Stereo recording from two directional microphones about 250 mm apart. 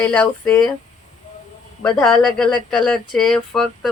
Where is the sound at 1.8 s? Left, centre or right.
Centre.